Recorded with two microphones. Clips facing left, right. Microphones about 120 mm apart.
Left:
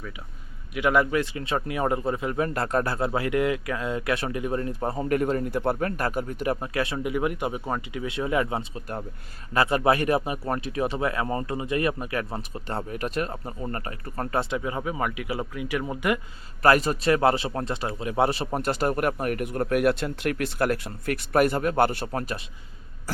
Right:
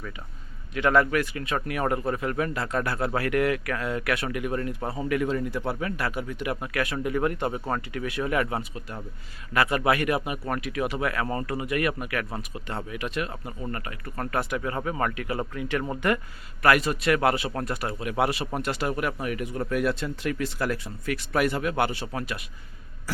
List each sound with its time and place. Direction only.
0.7 s speech: 10° left (ahead or behind)
1.1 s speech: 25° left (ahead or behind)
2.5 s speech: 45° left (ahead or behind)
2.8 s speech: 25° left (ahead or behind)
4.9 s speech: 40° left (ahead or behind); by 7.0 s 25° left (ahead or behind)
7.0 s speech: 10° left (ahead or behind)
14.7 s speech: 10° left (ahead or behind)
16.6 s speech: 35° left (ahead or behind)